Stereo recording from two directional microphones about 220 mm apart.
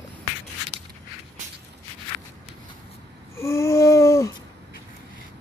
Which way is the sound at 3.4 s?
15° left (ahead or behind).